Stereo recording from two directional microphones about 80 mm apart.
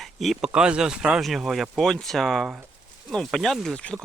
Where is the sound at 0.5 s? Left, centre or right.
Centre.